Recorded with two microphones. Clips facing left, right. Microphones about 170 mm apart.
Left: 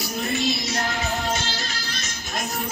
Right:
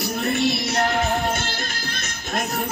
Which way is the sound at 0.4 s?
60° right (ahead or behind).